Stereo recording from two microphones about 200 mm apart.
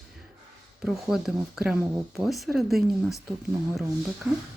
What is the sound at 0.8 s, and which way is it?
Speech, centre (ahead or behind).